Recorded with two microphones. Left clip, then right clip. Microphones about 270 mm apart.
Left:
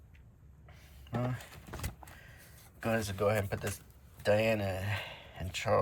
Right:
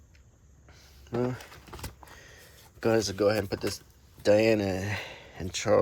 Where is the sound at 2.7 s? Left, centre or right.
Right.